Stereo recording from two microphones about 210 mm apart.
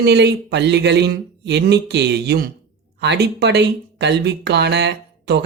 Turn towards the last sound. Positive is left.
turn(degrees=-55)  # may be behind; listen again after turning